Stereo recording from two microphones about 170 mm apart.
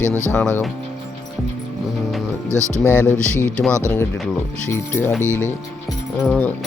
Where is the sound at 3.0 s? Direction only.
15° left (ahead or behind).